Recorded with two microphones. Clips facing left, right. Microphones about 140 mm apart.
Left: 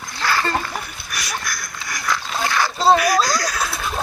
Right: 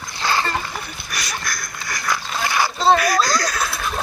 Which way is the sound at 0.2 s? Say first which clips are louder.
Even; 20° right (ahead or behind).